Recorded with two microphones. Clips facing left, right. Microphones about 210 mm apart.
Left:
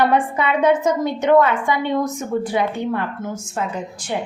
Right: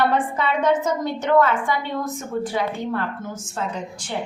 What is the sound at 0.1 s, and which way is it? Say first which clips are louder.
A woman's voice: left 3 dB; 15° left (ahead or behind).